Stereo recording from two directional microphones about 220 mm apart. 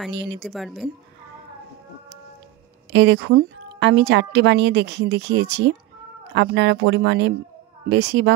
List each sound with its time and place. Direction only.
0.1 s a woman's voice: 50° right (ahead or behind)
0.4 s speech: centre (ahead or behind)
2.9 s a woman's voice: 55° right (ahead or behind)